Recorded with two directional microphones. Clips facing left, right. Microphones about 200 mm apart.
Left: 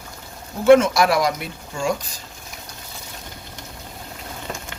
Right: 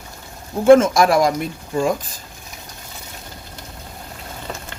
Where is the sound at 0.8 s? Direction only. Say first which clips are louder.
Right 3 dB; 45° right (ahead or behind).